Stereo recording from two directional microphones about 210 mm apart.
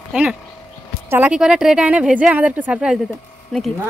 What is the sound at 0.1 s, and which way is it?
A woman's voice, 5° right (ahead or behind).